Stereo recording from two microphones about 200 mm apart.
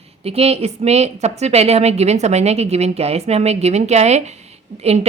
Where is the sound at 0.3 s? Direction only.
30° right (ahead or behind).